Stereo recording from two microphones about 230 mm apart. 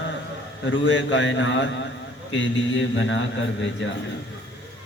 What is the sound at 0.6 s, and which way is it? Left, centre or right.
A man's voice, left.